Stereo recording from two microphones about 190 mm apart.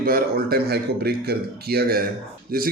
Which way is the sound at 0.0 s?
50° right (ahead or behind).